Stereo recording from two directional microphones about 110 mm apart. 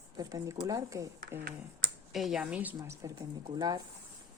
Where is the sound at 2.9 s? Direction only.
30° right (ahead or behind).